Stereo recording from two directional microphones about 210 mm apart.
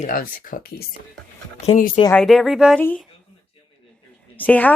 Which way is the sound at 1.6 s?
35° left (ahead or behind).